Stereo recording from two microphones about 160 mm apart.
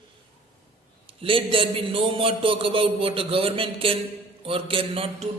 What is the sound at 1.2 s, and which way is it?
A man's voice, 35° right (ahead or behind).